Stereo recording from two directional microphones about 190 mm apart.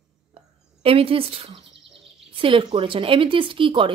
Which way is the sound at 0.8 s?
30° right (ahead or behind).